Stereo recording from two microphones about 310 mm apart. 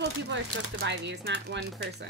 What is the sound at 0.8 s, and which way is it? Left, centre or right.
Speech, right.